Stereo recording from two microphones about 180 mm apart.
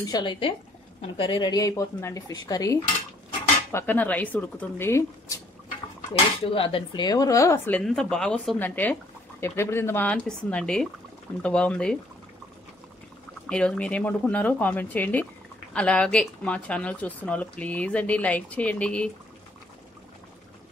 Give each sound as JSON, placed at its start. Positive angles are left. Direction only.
{"t": 0.1, "sound": "speech", "side_deg": 25}
{"t": 6.4, "sound": "speech", "side_deg": 30}
{"t": 13.5, "sound": "speech", "side_deg": 5}